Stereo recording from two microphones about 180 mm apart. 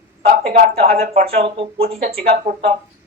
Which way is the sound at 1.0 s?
50° right (ahead or behind).